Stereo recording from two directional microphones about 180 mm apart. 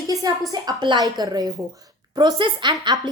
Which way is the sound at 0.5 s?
25° right (ahead or behind).